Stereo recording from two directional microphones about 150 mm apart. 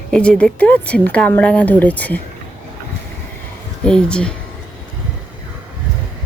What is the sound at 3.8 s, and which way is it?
Speech, 5° left (ahead or behind).